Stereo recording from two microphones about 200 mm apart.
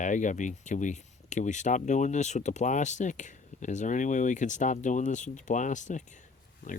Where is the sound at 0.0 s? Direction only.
40° left (ahead or behind).